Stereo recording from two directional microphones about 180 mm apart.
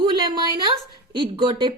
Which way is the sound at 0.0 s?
25° right (ahead or behind).